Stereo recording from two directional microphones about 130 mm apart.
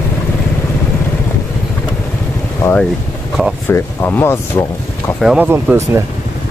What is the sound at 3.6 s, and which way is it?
Speech, 15° left (ahead or behind).